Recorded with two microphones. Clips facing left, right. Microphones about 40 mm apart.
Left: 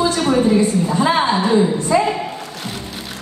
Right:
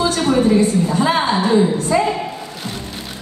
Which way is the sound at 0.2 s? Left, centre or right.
Centre.